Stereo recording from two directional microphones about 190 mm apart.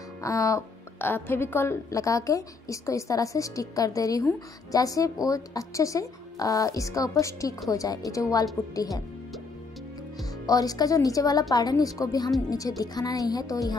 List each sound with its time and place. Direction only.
0.2 s a woman's voice: 15° left (ahead or behind)
10.4 s speech: 20° left (ahead or behind)